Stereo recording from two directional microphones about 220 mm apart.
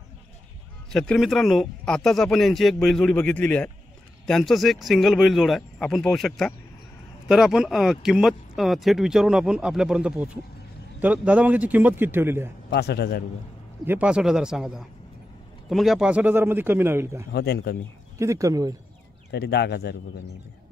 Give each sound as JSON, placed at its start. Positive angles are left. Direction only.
{"t": 0.9, "sound": "a man's voice", "side_deg": 0}
{"t": 12.6, "sound": "speech", "side_deg": 50}
{"t": 13.8, "sound": "a man's voice", "side_deg": -5}
{"t": 17.3, "sound": "speech", "side_deg": 45}
{"t": 18.2, "sound": "a man's voice", "side_deg": -15}
{"t": 19.3, "sound": "speech", "side_deg": 50}